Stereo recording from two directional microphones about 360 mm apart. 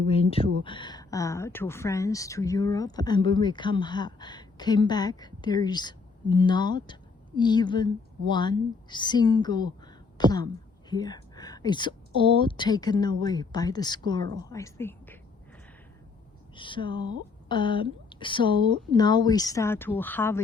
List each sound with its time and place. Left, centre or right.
0.1 s speech: centre
16.6 s speech: centre